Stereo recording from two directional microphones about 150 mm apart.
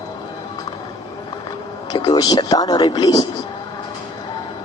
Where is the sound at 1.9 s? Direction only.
30° left (ahead or behind).